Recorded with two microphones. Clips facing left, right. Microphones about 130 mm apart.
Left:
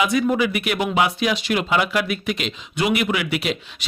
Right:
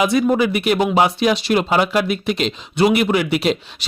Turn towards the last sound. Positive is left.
turn(degrees=-35)  # may be behind; listen again after turning